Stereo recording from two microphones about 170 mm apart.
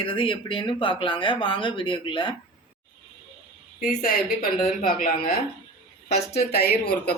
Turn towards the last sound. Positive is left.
turn(degrees=70)  # may be behind; listen again after turning